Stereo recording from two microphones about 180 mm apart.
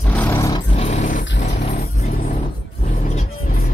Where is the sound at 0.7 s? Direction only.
35° left (ahead or behind).